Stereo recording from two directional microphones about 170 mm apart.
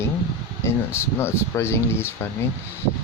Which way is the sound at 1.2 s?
15° left (ahead or behind).